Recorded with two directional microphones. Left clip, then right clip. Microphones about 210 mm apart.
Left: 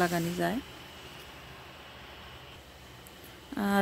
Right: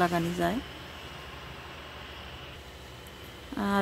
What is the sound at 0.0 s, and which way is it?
Speech, 25° left (ahead or behind).